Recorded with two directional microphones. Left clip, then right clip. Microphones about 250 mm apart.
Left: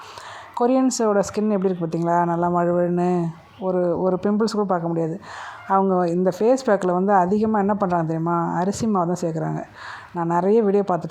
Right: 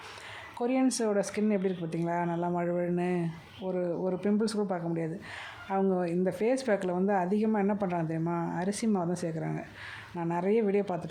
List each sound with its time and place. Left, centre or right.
0.5 s a woman's voice: centre